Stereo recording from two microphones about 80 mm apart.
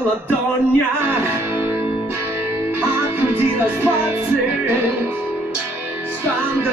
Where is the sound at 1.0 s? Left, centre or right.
Right.